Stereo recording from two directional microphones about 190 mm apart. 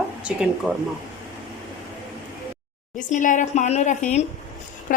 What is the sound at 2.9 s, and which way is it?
A woman's voice, 40° left (ahead or behind).